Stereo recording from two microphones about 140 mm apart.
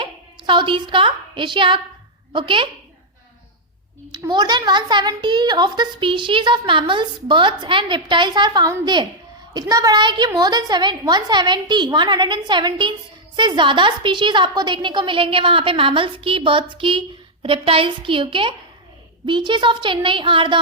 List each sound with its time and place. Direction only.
0.0 s a woman's voice: 35° right (ahead or behind)
4.3 s a woman's voice: 30° right (ahead or behind)